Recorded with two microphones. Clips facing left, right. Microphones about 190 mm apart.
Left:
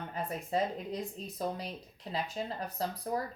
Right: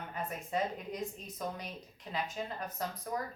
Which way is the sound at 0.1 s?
35° left (ahead or behind).